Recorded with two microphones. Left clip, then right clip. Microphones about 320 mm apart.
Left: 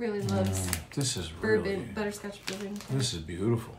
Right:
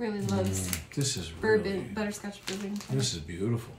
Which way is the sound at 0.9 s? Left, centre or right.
Centre.